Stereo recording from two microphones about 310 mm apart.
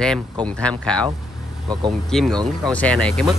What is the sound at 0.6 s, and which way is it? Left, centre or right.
Speech, centre.